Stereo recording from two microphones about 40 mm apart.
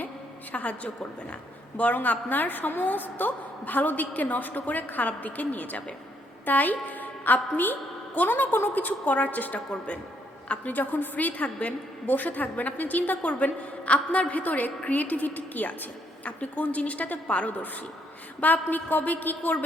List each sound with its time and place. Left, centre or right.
0.5 s a woman's voice: left
10.8 s a woman's voice: left